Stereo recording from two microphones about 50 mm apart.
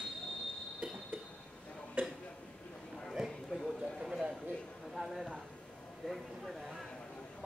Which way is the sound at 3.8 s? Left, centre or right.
Centre.